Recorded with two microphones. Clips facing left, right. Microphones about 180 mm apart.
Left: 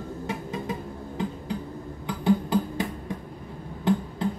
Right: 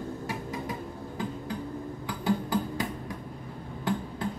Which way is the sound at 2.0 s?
20° left (ahead or behind).